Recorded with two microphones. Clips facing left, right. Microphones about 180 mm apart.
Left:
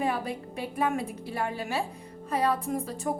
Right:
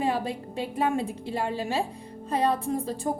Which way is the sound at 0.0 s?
25° right (ahead or behind).